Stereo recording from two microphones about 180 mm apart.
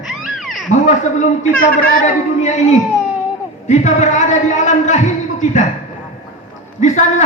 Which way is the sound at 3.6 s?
40° left (ahead or behind).